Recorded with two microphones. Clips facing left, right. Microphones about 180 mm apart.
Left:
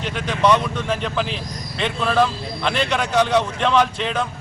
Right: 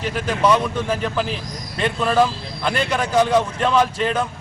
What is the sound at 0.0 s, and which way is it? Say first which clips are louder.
A man's voice: even; 5° right (ahead or behind).